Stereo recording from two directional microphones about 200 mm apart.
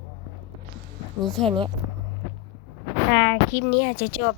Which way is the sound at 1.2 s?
Centre (ahead or behind).